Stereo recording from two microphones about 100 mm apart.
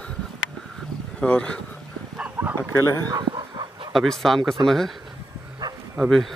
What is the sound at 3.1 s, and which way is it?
Chicken, 45° right (ahead or behind).